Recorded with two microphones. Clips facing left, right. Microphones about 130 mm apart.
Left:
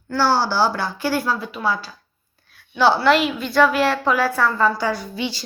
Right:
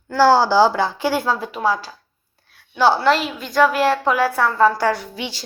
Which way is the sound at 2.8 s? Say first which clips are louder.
Even; 45° right (ahead or behind).